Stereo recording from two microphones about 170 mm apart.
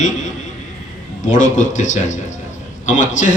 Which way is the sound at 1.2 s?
45° left (ahead or behind).